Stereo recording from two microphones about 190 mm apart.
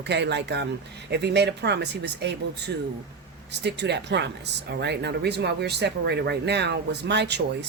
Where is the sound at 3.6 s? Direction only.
65° right (ahead or behind).